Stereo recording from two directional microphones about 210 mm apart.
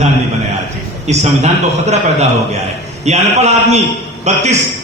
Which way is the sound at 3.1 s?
30° right (ahead or behind).